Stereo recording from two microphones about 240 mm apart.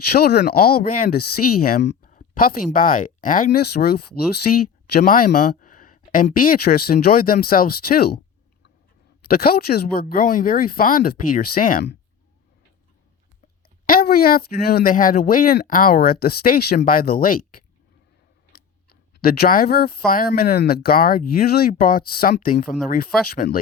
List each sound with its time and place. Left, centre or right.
0.0 s speech: left
9.2 s speech: left
13.8 s speech: left
19.2 s speech: left